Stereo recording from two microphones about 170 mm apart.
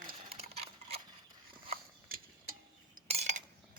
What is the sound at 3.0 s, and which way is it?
Cutlery, 35° right (ahead or behind).